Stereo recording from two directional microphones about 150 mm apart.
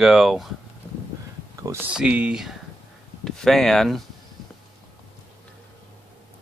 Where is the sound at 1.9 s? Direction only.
10° right (ahead or behind).